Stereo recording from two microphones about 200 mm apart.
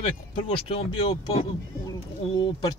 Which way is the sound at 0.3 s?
25° left (ahead or behind).